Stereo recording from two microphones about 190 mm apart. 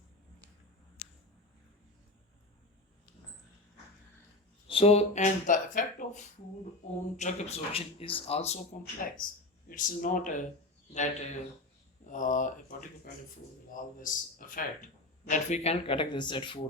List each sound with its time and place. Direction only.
4.7 s speech: 30° left (ahead or behind)
7.2 s speech: 35° left (ahead or behind)
13.7 s speech: 45° left (ahead or behind); by 16.6 s 25° left (ahead or behind)